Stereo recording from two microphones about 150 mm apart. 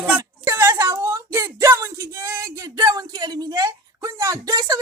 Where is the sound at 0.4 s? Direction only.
20° right (ahead or behind).